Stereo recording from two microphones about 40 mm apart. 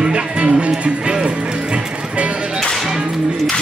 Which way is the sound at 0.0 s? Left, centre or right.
Right.